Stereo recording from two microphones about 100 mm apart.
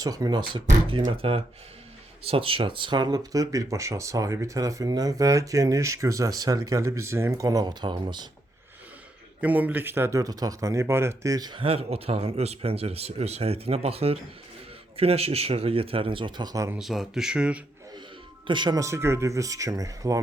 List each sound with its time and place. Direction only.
0.0 s speech: 35° right (ahead or behind)
9.4 s speech: 15° right (ahead or behind); by 11.5 s 35° right (ahead or behind)
11.5 s speech: 70° right (ahead or behind); by 16.6 s 45° right (ahead or behind)
16.7 s speech: centre (ahead or behind)
18.4 s speech: 50° right (ahead or behind)
18.8 s speech: 30° right (ahead or behind)